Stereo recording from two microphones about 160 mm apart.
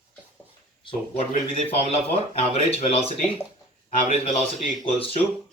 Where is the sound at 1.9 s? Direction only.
40° left (ahead or behind).